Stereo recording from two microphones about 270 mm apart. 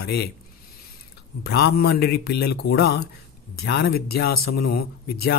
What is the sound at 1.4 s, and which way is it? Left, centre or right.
A man's voice, left.